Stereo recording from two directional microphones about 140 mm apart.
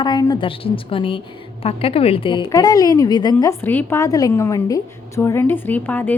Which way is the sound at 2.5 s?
25° left (ahead or behind).